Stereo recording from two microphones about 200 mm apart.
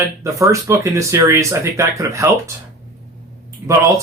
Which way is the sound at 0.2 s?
15° right (ahead or behind).